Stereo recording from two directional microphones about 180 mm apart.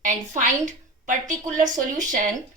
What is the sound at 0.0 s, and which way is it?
A woman's voice, 45° right (ahead or behind).